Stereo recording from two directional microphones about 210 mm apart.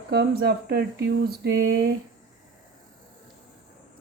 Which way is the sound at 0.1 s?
50° right (ahead or behind).